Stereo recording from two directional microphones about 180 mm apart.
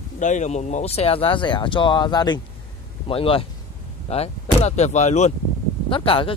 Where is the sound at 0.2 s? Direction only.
40° left (ahead or behind).